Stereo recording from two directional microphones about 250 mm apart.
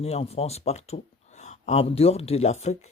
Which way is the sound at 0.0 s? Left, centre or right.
Left.